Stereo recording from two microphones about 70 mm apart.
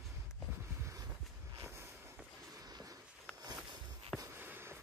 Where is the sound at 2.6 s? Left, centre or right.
Right.